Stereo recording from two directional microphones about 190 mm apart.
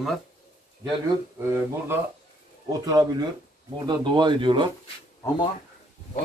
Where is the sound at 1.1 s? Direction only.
15° right (ahead or behind).